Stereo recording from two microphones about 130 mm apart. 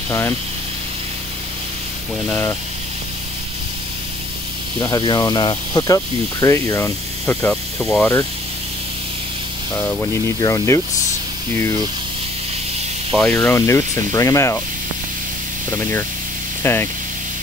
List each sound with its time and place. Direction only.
2.2 s speech: 20° left (ahead or behind)
4.7 s speech: 30° left (ahead or behind); by 8.1 s 10° left (ahead or behind)
9.8 s speech: 15° left (ahead or behind)
13.1 s speech: 5° left (ahead or behind)
13.5 s speech: 20° left (ahead or behind)
15.7 s speech: 20° left (ahead or behind)